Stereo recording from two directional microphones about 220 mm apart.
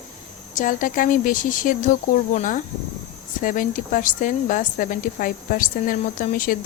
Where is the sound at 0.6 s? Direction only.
35° left (ahead or behind).